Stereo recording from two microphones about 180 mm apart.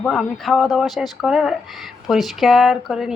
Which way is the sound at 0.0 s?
Centre (ahead or behind).